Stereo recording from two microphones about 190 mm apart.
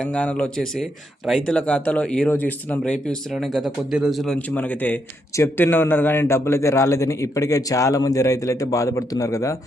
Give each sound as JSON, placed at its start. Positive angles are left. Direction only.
{"t": 0.0, "sound": "a man's voice", "side_deg": 5}